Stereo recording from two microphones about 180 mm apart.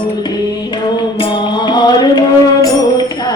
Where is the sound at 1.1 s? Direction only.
25° left (ahead or behind).